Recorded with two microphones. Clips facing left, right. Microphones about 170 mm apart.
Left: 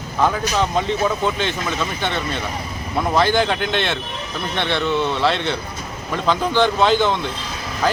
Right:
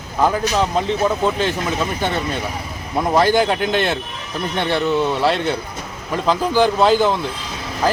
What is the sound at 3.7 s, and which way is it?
Speech, 40° right (ahead or behind).